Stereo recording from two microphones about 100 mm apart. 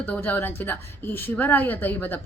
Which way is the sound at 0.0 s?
20° left (ahead or behind).